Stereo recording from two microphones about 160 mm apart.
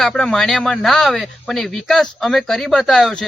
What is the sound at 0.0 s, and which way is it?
Speech, centre (ahead or behind).